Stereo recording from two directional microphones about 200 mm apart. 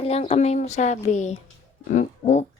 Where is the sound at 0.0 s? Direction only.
30° left (ahead or behind).